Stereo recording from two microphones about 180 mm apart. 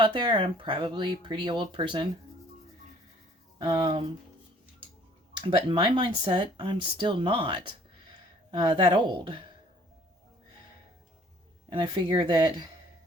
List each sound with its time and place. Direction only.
0.0 s speech: 30° right (ahead or behind)
3.6 s speech: 30° right (ahead or behind)
5.4 s speech: 30° right (ahead or behind)
11.7 s speech: 30° right (ahead or behind)